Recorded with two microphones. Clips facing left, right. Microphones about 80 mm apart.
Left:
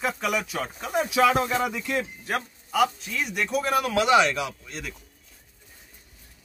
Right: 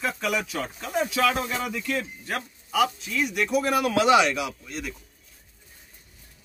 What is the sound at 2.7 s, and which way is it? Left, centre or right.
Speech, centre.